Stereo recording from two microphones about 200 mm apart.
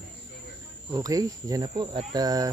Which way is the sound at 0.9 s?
15° right (ahead or behind).